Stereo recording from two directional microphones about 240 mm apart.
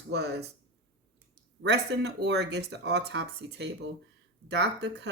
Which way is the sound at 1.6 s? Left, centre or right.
Right.